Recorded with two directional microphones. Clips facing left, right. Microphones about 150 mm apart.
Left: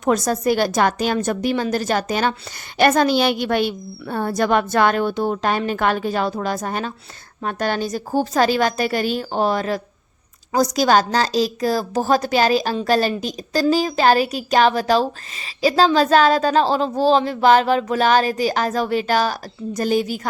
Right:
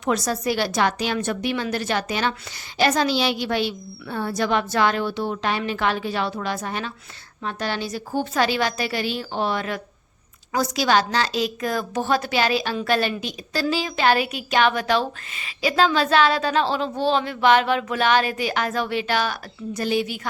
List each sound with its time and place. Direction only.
0.0 s a woman's voice: 45° left (ahead or behind)
2.7 s a woman's voice: 55° left (ahead or behind); by 20.2 s 40° left (ahead or behind)